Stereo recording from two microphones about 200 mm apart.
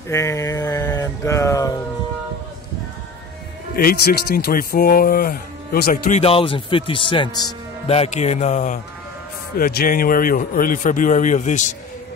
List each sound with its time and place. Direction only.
0.1 s mantra: 15° left (ahead or behind)
3.7 s speech: 50° left (ahead or behind)
6.1 s speech: 30° left (ahead or behind)
9.6 s speech: 50° left (ahead or behind)